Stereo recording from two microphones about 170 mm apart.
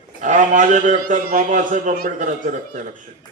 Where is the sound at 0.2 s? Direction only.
45° right (ahead or behind).